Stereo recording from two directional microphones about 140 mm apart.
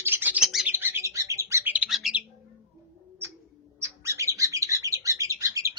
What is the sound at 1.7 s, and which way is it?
Bird, 5° right (ahead or behind).